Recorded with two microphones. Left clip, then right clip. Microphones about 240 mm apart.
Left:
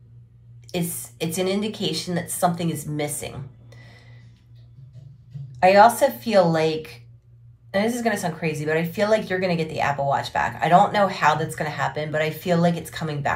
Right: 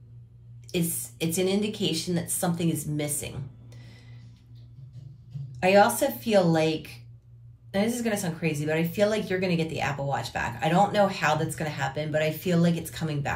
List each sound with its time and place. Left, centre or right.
0.9 s speech: centre
5.7 s speech: centre